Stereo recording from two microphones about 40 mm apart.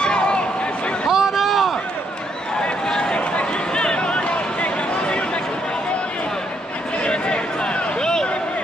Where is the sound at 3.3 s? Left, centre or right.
Left.